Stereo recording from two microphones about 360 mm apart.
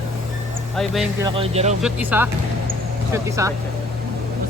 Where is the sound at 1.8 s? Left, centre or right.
Centre.